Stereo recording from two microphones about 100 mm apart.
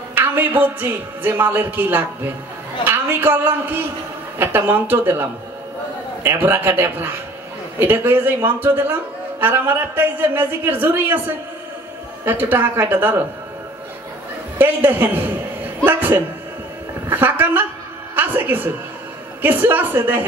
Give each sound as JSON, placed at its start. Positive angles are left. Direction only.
{"t": 0.1, "sound": "a woman's voice", "side_deg": -20}
{"t": 6.2, "sound": "a woman's voice", "side_deg": -20}
{"t": 14.6, "sound": "a woman's voice", "side_deg": -20}
{"t": 18.1, "sound": "music", "side_deg": -20}
{"t": 19.4, "sound": "a woman's voice", "side_deg": -20}